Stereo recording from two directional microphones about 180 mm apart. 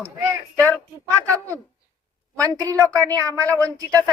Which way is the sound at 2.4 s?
20° right (ahead or behind).